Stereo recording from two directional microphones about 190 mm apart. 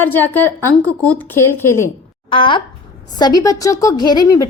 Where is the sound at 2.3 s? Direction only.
25° left (ahead or behind).